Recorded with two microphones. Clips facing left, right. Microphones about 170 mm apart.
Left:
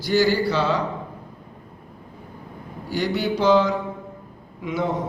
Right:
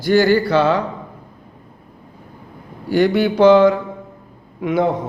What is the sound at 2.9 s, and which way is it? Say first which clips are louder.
A man's voice: right 8 dB; 55° right (ahead or behind).